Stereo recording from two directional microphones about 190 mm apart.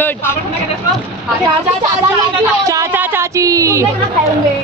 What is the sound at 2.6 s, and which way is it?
A woman's voice, 15° right (ahead or behind).